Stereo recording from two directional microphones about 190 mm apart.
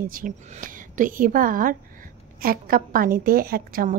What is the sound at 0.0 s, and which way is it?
A woman's voice, 45° right (ahead or behind).